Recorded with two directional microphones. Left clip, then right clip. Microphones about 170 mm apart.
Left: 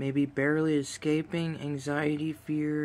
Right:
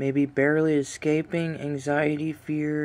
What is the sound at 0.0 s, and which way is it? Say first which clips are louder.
Speech: right 6 dB; 10° right (ahead or behind).